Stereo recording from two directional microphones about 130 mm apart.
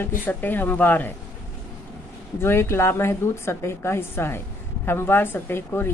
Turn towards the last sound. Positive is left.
turn(degrees=20)  # may be behind; listen again after turning